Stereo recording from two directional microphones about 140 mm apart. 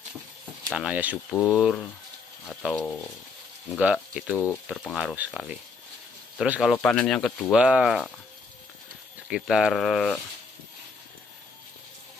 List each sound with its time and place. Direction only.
0.7 s speech: 10° right (ahead or behind)
1.3 s speech: 15° left (ahead or behind)
2.6 s speech: 5° left (ahead or behind)
3.8 s speech: 5° right (ahead or behind)
6.3 s speech: 5° right (ahead or behind)
6.7 s speech: 10° left (ahead or behind)
7.5 s speech: 5° right (ahead or behind)
9.3 s speech: 5° right (ahead or behind)